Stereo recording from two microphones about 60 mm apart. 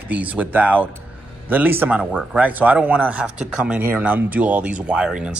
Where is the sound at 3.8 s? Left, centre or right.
Right; by 5.3 s centre.